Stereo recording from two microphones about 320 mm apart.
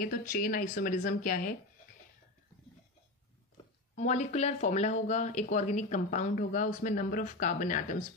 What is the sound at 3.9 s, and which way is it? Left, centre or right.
Speech, left.